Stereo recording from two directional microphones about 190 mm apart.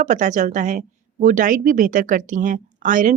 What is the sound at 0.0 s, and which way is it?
A woman's voice, 40° right (ahead or behind).